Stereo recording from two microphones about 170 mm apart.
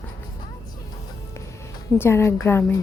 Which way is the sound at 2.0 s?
15° left (ahead or behind).